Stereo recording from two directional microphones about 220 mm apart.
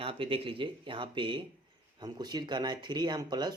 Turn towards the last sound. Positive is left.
turn(degrees=-20)  # may be behind; listen again after turning